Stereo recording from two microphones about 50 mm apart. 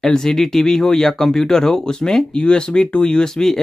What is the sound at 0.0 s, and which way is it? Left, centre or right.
Speech, centre.